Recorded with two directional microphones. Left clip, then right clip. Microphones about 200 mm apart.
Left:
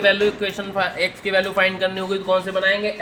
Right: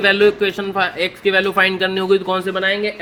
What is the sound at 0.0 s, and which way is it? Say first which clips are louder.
A man's voice: right 4 dB; 50° right (ahead or behind).